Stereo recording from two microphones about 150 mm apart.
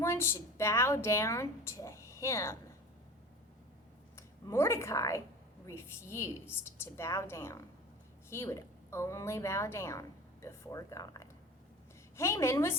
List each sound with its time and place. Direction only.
0.0 s a woman's voice: 15° left (ahead or behind)
4.4 s a woman's voice: 20° left (ahead or behind)